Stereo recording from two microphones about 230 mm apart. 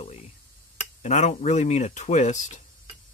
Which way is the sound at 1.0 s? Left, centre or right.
Left.